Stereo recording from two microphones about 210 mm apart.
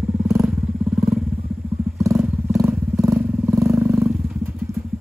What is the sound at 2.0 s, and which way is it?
Vehicle, 15° right (ahead or behind).